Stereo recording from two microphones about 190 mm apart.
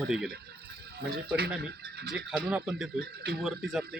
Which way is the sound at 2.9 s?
55° right (ahead or behind).